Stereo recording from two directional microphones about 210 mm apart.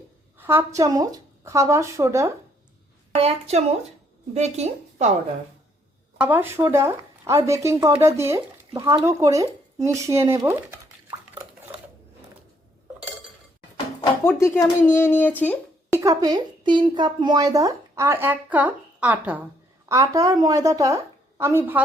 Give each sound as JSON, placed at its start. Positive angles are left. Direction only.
{"t": 0.3, "sound": "a woman's voice", "side_deg": -10}
{"t": 3.2, "sound": "a woman's voice", "side_deg": -30}
{"t": 6.1, "sound": "a woman's voice", "side_deg": -10}
{"t": 14.3, "sound": "speech", "side_deg": 10}
{"t": 15.9, "sound": "a woman's voice", "side_deg": -15}